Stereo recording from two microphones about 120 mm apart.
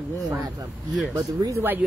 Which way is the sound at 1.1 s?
30° right (ahead or behind).